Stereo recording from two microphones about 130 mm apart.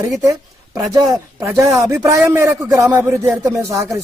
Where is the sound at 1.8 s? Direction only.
25° right (ahead or behind).